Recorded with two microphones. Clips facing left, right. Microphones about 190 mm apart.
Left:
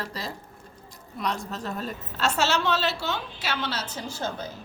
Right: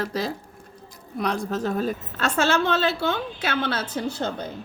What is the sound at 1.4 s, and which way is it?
A woman's voice, 50° right (ahead or behind).